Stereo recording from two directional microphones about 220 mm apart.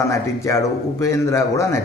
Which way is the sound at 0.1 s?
15° left (ahead or behind).